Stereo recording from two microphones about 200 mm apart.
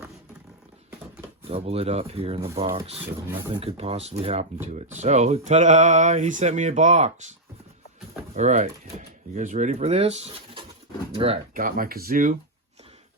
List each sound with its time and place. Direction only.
1.5 s speech: 30° right (ahead or behind)
8.4 s speech: 35° right (ahead or behind)
11.5 s speech: 45° right (ahead or behind)